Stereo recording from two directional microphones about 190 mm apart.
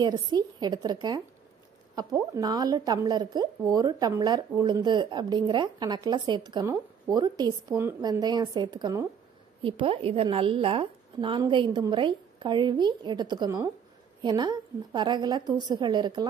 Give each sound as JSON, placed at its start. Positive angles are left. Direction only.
{"t": 0.0, "sound": "a woman's voice", "side_deg": -20}
{"t": 2.3, "sound": "a woman's voice", "side_deg": -20}
{"t": 9.6, "sound": "a woman's voice", "side_deg": -30}